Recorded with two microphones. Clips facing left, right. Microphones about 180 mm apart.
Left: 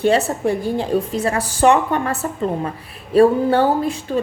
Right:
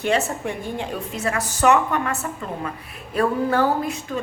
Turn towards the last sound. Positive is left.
turn(degrees=30)  # may be behind; listen again after turning